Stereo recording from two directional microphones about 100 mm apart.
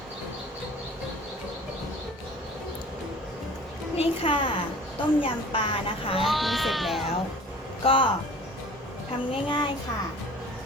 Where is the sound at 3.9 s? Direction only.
65° left (ahead or behind).